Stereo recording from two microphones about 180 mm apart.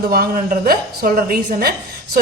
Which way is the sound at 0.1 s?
55° right (ahead or behind).